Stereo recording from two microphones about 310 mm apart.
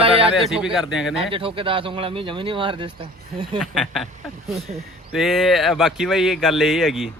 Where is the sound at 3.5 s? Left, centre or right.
Centre.